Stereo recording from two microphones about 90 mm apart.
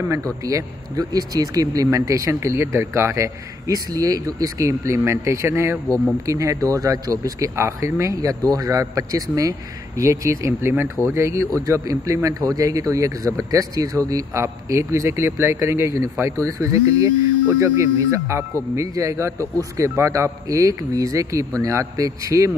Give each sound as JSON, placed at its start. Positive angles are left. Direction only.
{"t": 0.1, "sound": "a man's voice", "side_deg": -40}